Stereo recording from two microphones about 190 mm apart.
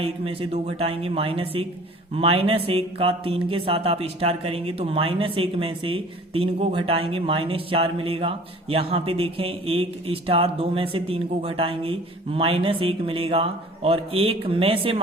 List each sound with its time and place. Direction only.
0.0 s a woman's voice: 30° right (ahead or behind)